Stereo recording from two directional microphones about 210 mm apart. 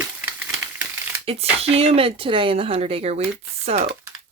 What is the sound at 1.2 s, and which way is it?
Speech, 30° right (ahead or behind).